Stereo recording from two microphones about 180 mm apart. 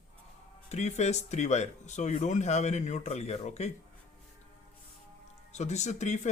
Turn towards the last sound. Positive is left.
turn(degrees=40)  # may be behind; listen again after turning